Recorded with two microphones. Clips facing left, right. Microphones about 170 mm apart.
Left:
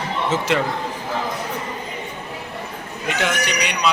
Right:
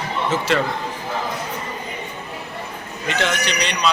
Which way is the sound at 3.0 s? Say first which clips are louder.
Even; 10° left (ahead or behind).